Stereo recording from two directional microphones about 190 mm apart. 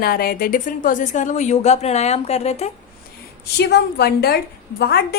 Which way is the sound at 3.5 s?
60° left (ahead or behind).